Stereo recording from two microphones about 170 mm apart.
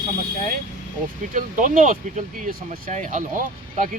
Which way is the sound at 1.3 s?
50° right (ahead or behind).